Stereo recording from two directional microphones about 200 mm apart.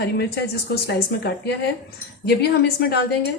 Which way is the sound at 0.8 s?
55° left (ahead or behind).